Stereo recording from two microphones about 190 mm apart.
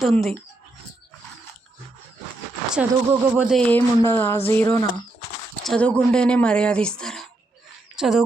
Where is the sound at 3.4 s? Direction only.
5° left (ahead or behind).